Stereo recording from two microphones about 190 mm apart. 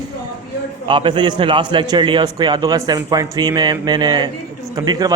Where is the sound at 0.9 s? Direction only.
25° right (ahead or behind).